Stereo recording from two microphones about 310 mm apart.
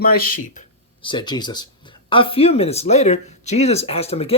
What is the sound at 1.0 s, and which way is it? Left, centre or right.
Speech, centre.